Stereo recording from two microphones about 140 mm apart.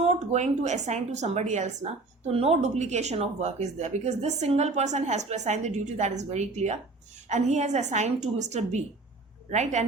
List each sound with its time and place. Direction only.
0.0 s a woman's voice: 50° right (ahead or behind)